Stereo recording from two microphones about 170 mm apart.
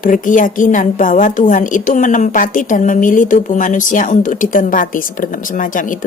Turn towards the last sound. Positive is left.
turn(degrees=50)  # may be behind; listen again after turning